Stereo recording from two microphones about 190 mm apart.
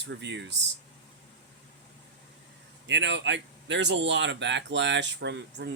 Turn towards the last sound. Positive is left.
turn(degrees=-65)  # may be behind; listen again after turning